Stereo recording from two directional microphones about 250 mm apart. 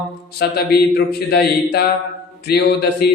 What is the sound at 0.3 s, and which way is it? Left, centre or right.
Mantra, left.